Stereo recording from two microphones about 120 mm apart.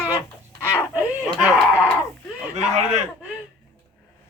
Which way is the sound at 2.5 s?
75° right (ahead or behind).